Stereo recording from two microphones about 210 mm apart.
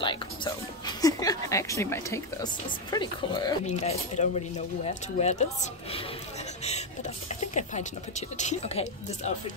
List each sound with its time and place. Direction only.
0.0 s speech: 25° left (ahead or behind)
3.6 s speech: 30° left (ahead or behind)
6.6 s a sound: 30° left (ahead or behind)
8.4 s speech: 30° left (ahead or behind)